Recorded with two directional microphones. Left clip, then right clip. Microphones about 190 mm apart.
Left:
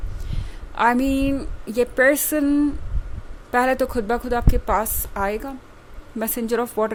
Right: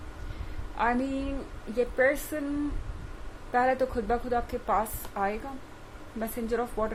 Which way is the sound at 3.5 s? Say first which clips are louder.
Left 6 dB; 55° left (ahead or behind).